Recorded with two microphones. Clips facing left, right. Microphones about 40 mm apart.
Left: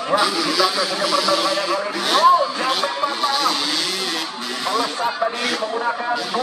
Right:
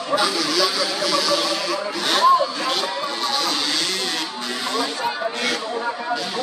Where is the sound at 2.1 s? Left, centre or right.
Centre.